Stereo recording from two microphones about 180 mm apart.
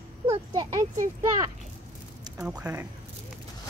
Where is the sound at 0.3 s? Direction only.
25° right (ahead or behind).